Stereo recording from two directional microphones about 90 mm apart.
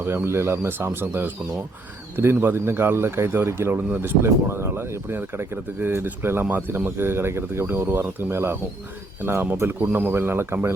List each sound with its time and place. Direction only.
0.0 s speech: 30° right (ahead or behind)